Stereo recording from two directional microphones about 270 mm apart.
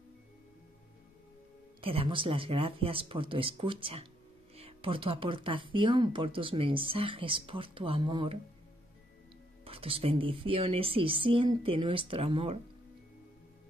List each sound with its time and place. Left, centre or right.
1.8 s speech: centre
9.7 s speech: right